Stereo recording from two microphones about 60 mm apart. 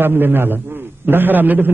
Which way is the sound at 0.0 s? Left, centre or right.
Right.